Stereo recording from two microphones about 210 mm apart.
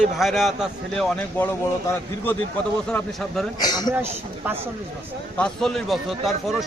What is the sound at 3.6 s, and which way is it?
Speech, 20° left (ahead or behind).